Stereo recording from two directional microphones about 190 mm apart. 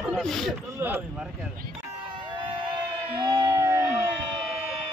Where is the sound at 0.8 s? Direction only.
10° right (ahead or behind).